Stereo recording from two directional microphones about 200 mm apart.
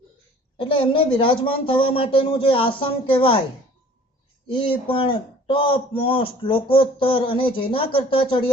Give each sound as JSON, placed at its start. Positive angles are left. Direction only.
{"t": 0.5, "sound": "a man's voice", "side_deg": 25}
{"t": 4.4, "sound": "a man's voice", "side_deg": 25}